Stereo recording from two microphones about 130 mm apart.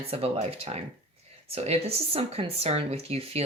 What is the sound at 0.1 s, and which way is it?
Speech, 50° right (ahead or behind).